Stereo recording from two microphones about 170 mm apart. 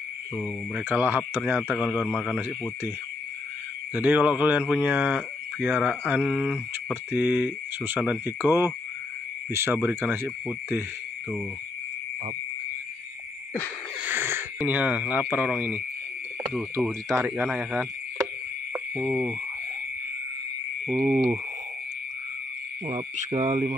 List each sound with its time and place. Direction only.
0.7 s speech: 10° right (ahead or behind)
3.9 s speech: 10° right (ahead or behind)
14.0 s speech: 15° right (ahead or behind)
16.8 s speech: 10° right (ahead or behind)
18.7 s cricket: 5° right (ahead or behind)
20.9 s speech: 15° right (ahead or behind)
22.8 s speech: 35° right (ahead or behind)